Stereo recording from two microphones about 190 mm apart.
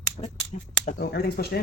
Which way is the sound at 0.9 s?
55° left (ahead or behind).